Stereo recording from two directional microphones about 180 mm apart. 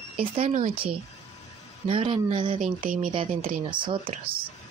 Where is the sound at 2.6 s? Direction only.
45° right (ahead or behind).